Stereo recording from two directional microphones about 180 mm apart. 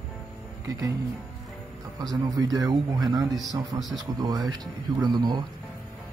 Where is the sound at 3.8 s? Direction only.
Centre (ahead or behind).